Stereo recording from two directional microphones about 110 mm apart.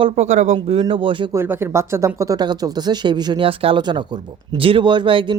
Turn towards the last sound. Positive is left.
turn(degrees=-50)  # may be behind; listen again after turning